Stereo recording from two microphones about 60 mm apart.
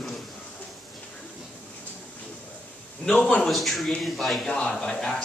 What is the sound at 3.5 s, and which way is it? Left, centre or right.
Speech, centre.